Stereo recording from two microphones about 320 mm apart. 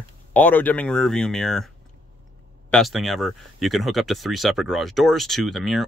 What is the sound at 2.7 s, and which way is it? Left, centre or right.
Speech, centre.